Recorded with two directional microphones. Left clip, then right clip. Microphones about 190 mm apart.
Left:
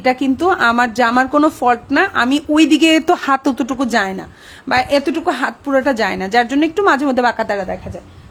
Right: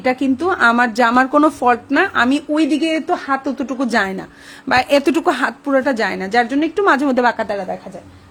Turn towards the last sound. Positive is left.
turn(degrees=20)  # may be behind; listen again after turning